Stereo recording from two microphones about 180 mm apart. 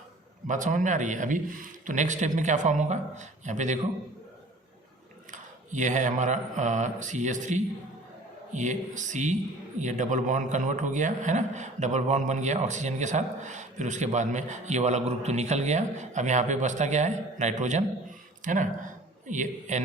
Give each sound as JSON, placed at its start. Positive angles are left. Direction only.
{"t": 0.4, "sound": "a man's voice", "side_deg": -45}
{"t": 5.3, "sound": "a man's voice", "side_deg": -45}